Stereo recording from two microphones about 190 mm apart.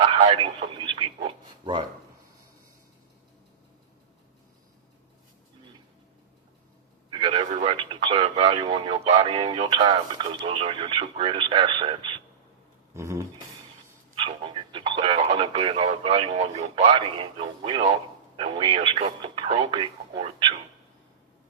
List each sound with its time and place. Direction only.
0.0 s speech: 30° right (ahead or behind)
7.1 s a sound: 30° right (ahead or behind)
7.8 s speech: 25° right (ahead or behind)
12.9 s speech: 15° right (ahead or behind)
14.2 s speech: 25° right (ahead or behind)